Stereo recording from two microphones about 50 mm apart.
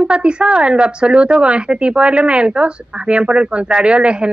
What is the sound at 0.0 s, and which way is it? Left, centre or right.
A woman's voice, right.